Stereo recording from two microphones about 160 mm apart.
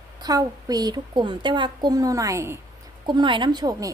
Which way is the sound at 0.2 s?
25° right (ahead or behind).